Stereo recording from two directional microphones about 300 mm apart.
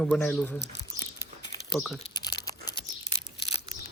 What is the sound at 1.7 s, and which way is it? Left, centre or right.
Speech, centre.